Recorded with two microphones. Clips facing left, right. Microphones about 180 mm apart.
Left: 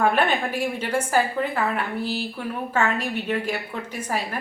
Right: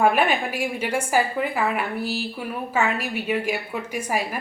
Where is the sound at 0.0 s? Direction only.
10° right (ahead or behind).